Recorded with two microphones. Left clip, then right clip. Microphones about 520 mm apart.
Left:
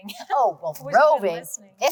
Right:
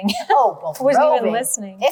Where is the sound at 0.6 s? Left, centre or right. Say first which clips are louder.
Right 3 dB; left.